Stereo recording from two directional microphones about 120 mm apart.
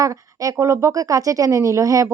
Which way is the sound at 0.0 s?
30° right (ahead or behind).